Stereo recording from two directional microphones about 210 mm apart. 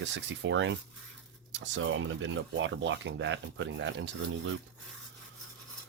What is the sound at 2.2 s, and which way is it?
Speech, 65° right (ahead or behind).